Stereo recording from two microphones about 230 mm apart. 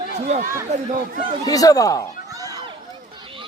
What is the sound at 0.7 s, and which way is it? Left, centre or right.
Speech, right.